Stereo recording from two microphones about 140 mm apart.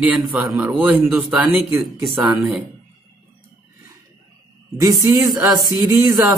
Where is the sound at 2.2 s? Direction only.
5° right (ahead or behind).